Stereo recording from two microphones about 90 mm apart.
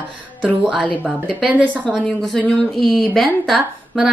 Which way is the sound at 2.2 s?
5° left (ahead or behind).